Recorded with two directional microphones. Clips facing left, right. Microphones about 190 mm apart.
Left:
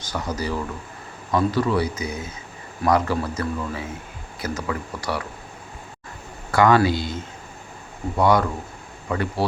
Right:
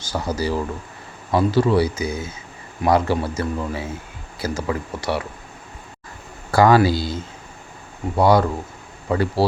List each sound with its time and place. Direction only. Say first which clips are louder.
0.1 s speech: right 4 dB; 30° right (ahead or behind)
6.5 s a man's voice: right 2 dB; 35° right (ahead or behind)